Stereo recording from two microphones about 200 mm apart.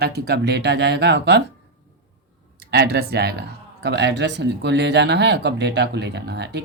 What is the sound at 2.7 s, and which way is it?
Speech, 55° right (ahead or behind).